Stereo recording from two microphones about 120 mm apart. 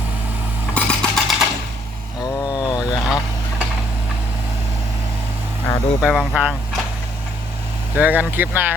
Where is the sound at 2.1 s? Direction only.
30° left (ahead or behind).